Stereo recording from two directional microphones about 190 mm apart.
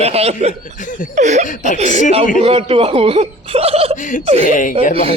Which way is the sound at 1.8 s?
35° right (ahead or behind).